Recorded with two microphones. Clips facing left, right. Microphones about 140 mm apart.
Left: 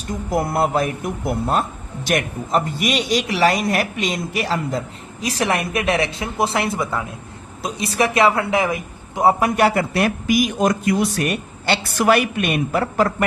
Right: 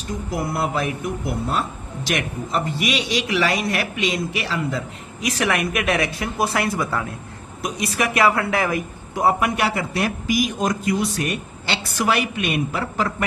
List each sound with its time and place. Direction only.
0.3 s a man's voice: 45° left (ahead or behind); by 9.3 s 20° left (ahead or behind)
9.4 s a man's voice: 45° left (ahead or behind)